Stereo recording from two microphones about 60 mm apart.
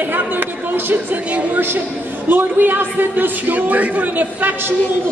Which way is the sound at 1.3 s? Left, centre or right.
Right.